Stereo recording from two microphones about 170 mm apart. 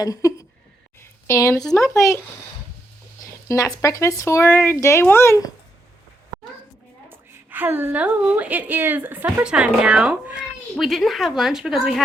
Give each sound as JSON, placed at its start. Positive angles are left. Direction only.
{"t": 0.0, "sound": "a sound", "side_deg": 20}
{"t": 3.5, "sound": "speech", "side_deg": 20}
{"t": 7.1, "sound": "a woman's voice", "side_deg": -10}